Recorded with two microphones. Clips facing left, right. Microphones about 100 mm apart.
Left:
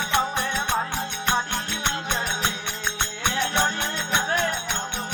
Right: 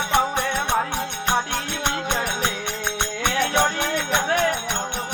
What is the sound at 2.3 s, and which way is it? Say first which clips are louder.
Music: right 3 dB; 40° right (ahead or behind).